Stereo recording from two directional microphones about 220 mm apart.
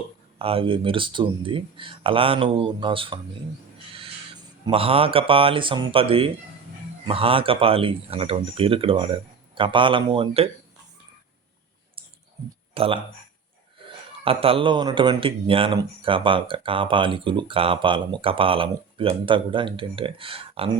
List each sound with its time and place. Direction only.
0.3 s speech: 25° right (ahead or behind)
4.6 s speech: 25° right (ahead or behind)
12.7 s speech: 25° right (ahead or behind)
14.3 s speech: 25° right (ahead or behind)